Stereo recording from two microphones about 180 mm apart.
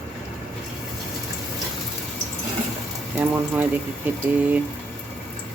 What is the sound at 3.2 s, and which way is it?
Speech, 10° right (ahead or behind).